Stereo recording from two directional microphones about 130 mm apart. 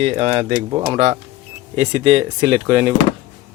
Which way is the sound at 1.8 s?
45° right (ahead or behind).